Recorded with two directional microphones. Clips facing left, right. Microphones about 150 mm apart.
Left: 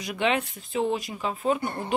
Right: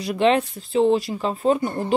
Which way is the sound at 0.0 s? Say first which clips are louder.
Right 7 dB; 35° right (ahead or behind).